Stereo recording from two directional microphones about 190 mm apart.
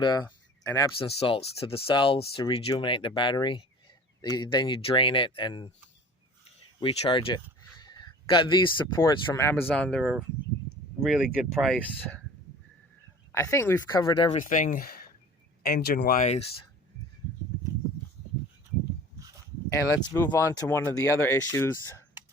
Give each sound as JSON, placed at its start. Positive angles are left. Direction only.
{"t": 0.0, "sound": "speech", "side_deg": 20}
{"t": 0.3, "sound": "a sound", "side_deg": 15}
{"t": 0.9, "sound": "speech", "side_deg": 30}
{"t": 6.7, "sound": "a man's voice", "side_deg": 25}
{"t": 13.3, "sound": "speech", "side_deg": 15}
{"t": 14.4, "sound": "speech", "side_deg": 45}
{"t": 19.7, "sound": "speech", "side_deg": 20}